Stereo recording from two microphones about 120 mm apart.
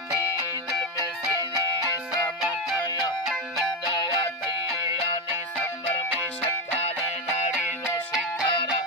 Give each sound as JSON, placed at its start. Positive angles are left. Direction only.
{"t": 2.8, "sound": "music", "side_deg": 35}
{"t": 8.5, "sound": "music", "side_deg": 50}